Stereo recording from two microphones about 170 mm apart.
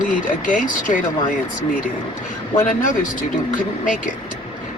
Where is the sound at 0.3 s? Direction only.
50° left (ahead or behind).